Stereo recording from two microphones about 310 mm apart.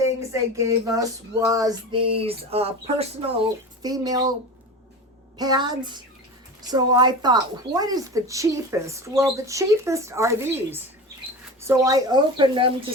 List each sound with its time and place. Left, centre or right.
0.0 s speech: centre
5.4 s speech: centre